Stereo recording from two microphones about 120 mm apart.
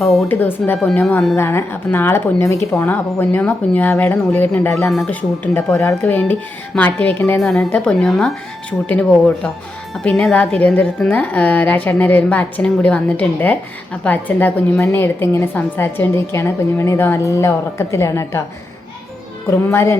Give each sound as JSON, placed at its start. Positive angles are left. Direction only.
{"t": 0.0, "sound": "speech", "side_deg": 0}
{"t": 0.3, "sound": "a woman's voice", "side_deg": 15}
{"t": 4.8, "sound": "speech", "side_deg": 5}
{"t": 5.4, "sound": "a woman's voice", "side_deg": 15}
{"t": 7.3, "sound": "a woman's voice", "side_deg": 5}
{"t": 19.5, "sound": "a woman's voice", "side_deg": 25}